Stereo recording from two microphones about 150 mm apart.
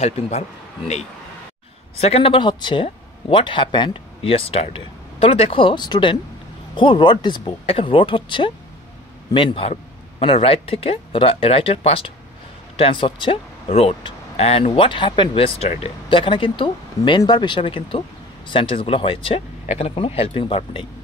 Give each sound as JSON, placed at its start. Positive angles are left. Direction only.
{"t": 0.0, "sound": "speech", "side_deg": 45}